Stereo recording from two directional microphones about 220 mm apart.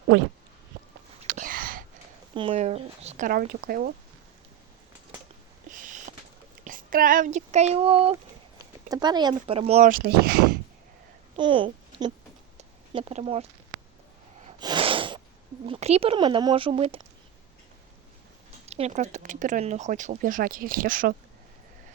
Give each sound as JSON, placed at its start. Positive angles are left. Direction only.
{"t": 1.2, "sound": "a sound", "side_deg": -35}
{"t": 2.3, "sound": "speech", "side_deg": -25}
{"t": 5.6, "sound": "a sound", "side_deg": -35}
{"t": 6.7, "sound": "speech", "side_deg": -40}
{"t": 11.3, "sound": "a child's voice", "side_deg": -20}
{"t": 12.5, "sound": "a sound", "side_deg": -25}
{"t": 14.6, "sound": "sneeze", "side_deg": -20}
{"t": 15.6, "sound": "speech", "side_deg": -25}
{"t": 18.6, "sound": "speech", "side_deg": -30}